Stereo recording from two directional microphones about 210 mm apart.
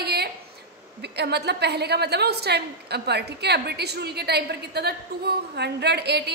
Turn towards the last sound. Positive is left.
turn(degrees=-50)  # may be behind; listen again after turning